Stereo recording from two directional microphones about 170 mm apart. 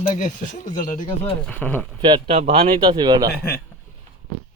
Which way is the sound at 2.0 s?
25° right (ahead or behind).